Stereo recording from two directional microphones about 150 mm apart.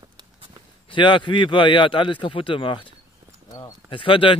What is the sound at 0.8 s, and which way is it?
Speech, 35° left (ahead or behind).